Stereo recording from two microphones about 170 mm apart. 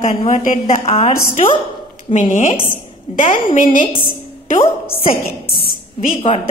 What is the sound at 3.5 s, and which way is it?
Speech, 50° left (ahead or behind).